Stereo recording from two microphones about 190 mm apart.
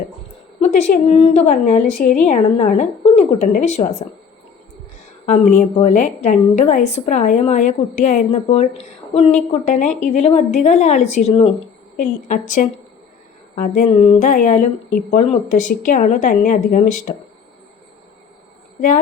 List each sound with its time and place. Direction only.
0.6 s a woman's voice: 35° left (ahead or behind)
5.2 s a woman's voice: 40° left (ahead or behind)